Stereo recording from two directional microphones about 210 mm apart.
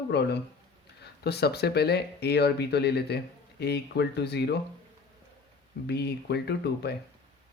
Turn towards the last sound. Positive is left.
turn(degrees=50)  # may be behind; listen again after turning